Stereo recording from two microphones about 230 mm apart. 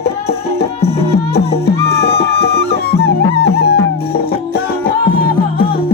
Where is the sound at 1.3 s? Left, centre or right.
Left.